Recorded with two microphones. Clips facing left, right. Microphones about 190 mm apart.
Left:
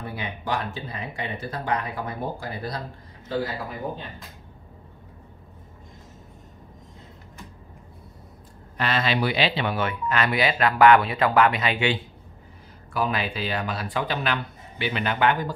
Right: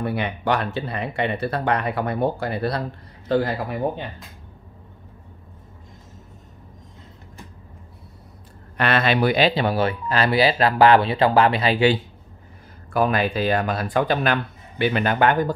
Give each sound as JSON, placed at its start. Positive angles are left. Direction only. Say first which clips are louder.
{"t": 0.0, "sound": "speech", "louder": "right 8 dB", "side_deg": -70}
{"t": 8.7, "sound": "speech", "louder": "right 5 dB", "side_deg": -60}
{"t": 12.9, "sound": "speech", "louder": "right 6 dB", "side_deg": -50}